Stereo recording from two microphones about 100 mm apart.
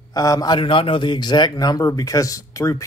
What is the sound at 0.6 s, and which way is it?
Speech, 60° left (ahead or behind).